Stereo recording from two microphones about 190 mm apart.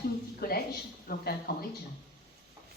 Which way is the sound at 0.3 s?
55° left (ahead or behind).